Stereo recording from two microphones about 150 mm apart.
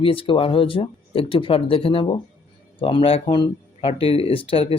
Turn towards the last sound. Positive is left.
turn(degrees=40)  # may be behind; listen again after turning